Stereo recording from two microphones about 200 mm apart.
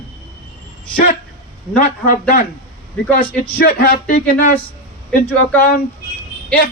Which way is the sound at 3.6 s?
50° left (ahead or behind).